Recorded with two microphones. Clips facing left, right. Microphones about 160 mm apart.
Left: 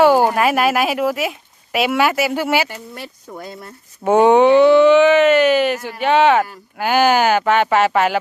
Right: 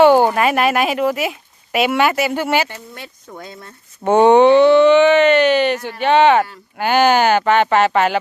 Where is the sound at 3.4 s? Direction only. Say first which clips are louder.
Left 3 dB; 35° left (ahead or behind).